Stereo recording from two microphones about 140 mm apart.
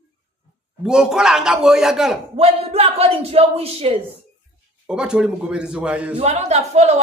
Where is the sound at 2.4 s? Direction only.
45° right (ahead or behind).